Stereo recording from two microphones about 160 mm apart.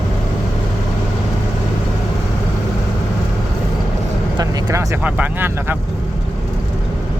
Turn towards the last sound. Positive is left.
turn(degrees=-10)  # may be behind; listen again after turning